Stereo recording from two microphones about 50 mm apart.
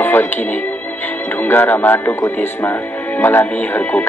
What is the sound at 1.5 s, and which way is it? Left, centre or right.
Speech, left.